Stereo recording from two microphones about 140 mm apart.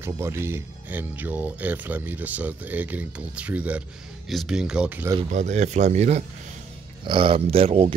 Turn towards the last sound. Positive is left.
turn(degrees=-45)  # may be behind; listen again after turning